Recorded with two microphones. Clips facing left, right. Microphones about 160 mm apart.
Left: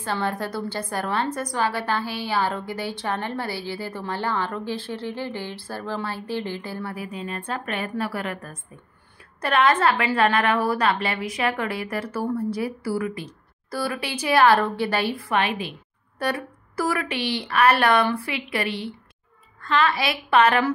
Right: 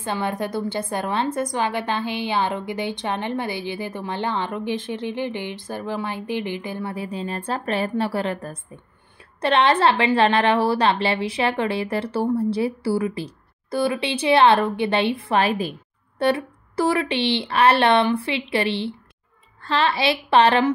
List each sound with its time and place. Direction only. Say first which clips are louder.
0.0 s a woman's voice: right 1 dB; 20° right (ahead or behind); by 15.7 s 40° right (ahead or behind)
16.2 s a woman's voice: right 6 dB; 25° right (ahead or behind)